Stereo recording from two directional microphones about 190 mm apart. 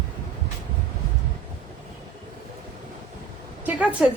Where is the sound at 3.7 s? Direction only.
5° right (ahead or behind).